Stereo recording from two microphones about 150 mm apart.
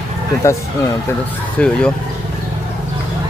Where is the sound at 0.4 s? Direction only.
20° left (ahead or behind).